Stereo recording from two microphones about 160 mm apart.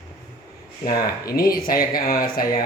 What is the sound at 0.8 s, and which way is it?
A woman's voice, 65° left (ahead or behind).